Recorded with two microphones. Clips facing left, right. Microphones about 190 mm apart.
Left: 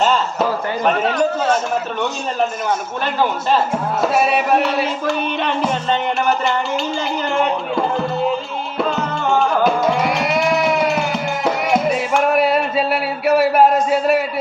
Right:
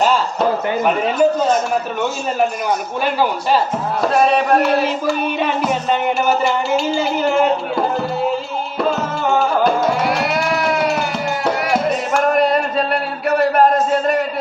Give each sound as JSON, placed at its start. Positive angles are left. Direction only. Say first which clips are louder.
{"t": 0.9, "sound": "music", "louder": "right 1 dB", "side_deg": -5}
{"t": 3.0, "sound": "a man's voice", "louder": "right 2 dB", "side_deg": -10}
{"t": 4.0, "sound": "music", "louder": "right 3 dB", "side_deg": 5}
{"t": 5.0, "sound": "music", "louder": "right 1 dB", "side_deg": -5}